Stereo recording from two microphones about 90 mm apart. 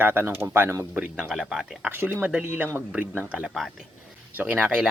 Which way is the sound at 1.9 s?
20° right (ahead or behind).